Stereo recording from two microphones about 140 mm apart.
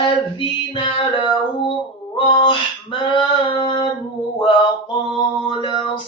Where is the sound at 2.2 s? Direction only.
35° left (ahead or behind).